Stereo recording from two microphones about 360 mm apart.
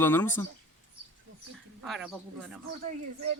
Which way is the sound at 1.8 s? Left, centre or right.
Centre.